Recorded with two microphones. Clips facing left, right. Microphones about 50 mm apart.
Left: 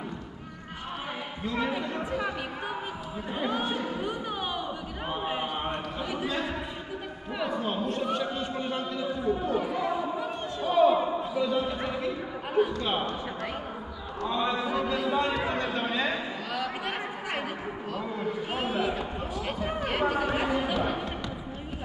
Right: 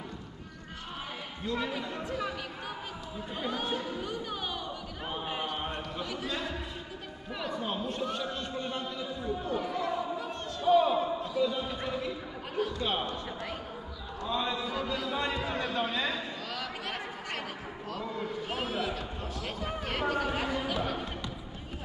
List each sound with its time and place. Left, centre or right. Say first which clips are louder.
1.4 s speech: left 3 dB; centre
2.0 s speech: left 2 dB; left
3.3 s speech: left 4 dB; centre
5.1 s a sound: left 4 dB; centre
7.3 s a man's voice: left 4 dB; centre
10.6 s basketball bounce: left 2 dB; centre
11.5 s speech: left 5 dB; centre
14.3 s a man's voice: left 4 dB; centre
15.5 s a sound: left 2 dB; centre
17.9 s a man's voice: left 3 dB; centre